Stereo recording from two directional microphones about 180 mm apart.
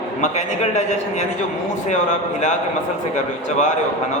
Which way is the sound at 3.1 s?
40° left (ahead or behind).